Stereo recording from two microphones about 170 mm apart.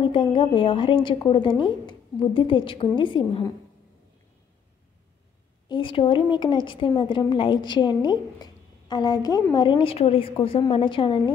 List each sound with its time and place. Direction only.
0.0 s a woman's voice: 30° left (ahead or behind)
5.7 s a woman's voice: 30° left (ahead or behind)